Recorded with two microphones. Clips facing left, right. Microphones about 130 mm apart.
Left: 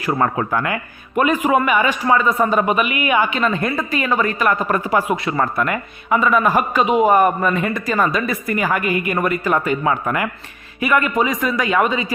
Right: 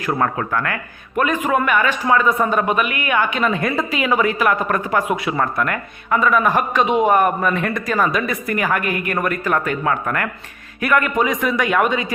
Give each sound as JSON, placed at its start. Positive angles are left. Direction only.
{"t": 0.0, "sound": "speech", "side_deg": 5}